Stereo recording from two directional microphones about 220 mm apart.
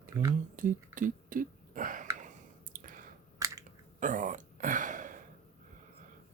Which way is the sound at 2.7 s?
40° right (ahead or behind).